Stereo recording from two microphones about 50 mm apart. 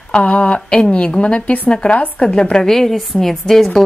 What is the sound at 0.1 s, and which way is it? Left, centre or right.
A woman's voice, left.